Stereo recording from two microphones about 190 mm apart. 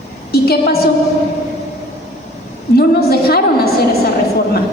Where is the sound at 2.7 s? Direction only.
55° left (ahead or behind).